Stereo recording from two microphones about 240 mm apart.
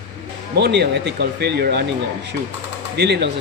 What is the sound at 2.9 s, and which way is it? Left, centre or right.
Speech, right.